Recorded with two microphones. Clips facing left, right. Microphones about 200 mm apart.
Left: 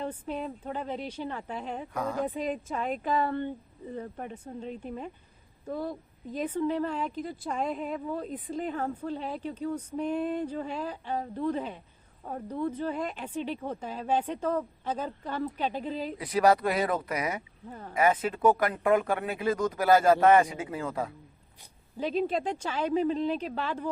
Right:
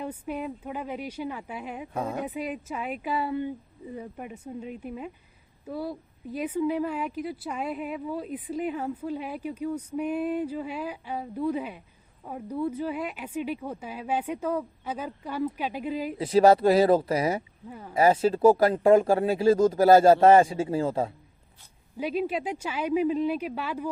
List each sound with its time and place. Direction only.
0.0 s a woman's voice: 10° right (ahead or behind)
1.9 s speech: 25° right (ahead or behind)
2.2 s a woman's voice: 10° right (ahead or behind)
16.1 s speech: 25° right (ahead or behind)
21.9 s a woman's voice: 10° right (ahead or behind)